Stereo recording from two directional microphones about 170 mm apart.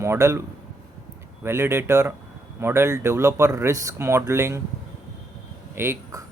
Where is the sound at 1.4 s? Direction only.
15° right (ahead or behind).